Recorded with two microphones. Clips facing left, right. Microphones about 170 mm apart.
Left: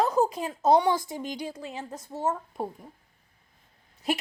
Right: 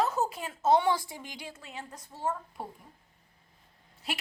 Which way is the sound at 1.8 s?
20° left (ahead or behind).